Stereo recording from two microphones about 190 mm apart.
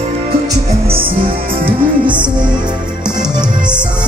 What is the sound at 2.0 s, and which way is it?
Music, 25° right (ahead or behind).